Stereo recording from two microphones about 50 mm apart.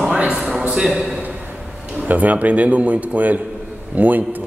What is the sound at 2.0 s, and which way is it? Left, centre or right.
Speech, right.